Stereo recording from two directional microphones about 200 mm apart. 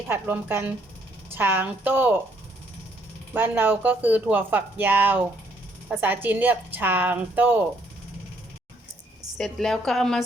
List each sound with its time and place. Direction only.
0.1 s speech: 10° right (ahead or behind)
3.3 s speech: 10° right (ahead or behind)
9.4 s a woman's voice: centre (ahead or behind)